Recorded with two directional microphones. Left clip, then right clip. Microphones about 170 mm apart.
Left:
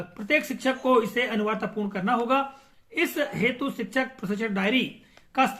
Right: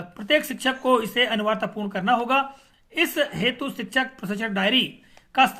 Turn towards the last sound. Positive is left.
turn(degrees=-30)  # may be behind; listen again after turning